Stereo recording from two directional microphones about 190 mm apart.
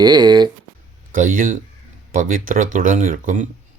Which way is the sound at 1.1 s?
45° right (ahead or behind).